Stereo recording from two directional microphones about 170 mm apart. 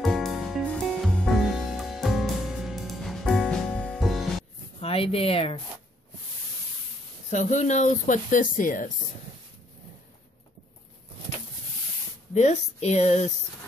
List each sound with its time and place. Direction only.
0.0 s music: centre (ahead or behind)
4.7 s speech: 35° left (ahead or behind)
7.2 s speech: 45° left (ahead or behind)
12.4 s speech: 45° left (ahead or behind)